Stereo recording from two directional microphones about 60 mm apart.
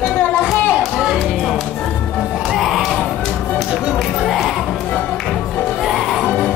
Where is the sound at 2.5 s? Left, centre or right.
Centre.